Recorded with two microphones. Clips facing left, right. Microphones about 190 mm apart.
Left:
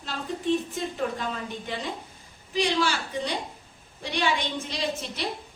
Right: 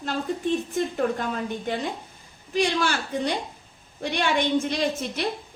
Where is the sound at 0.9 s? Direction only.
50° right (ahead or behind).